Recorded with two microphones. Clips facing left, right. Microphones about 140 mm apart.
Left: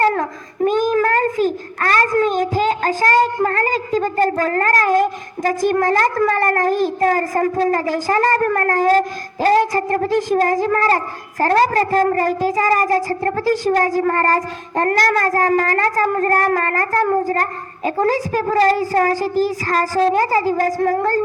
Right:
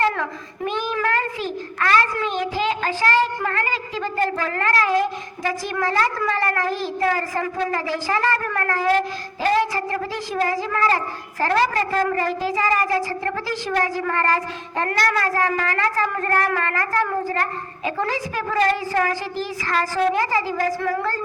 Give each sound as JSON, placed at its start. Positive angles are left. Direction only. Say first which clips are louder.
{"t": 0.0, "sound": "a child's voice", "louder": "left 5 dB", "side_deg": 40}